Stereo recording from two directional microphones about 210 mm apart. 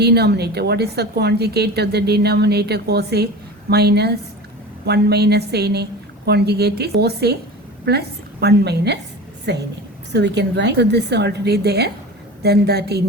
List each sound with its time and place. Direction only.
0.0 s a woman's voice: 50° right (ahead or behind)